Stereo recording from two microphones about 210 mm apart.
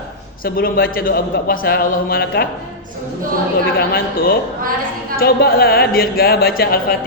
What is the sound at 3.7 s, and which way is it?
A man's voice, 45° left (ahead or behind).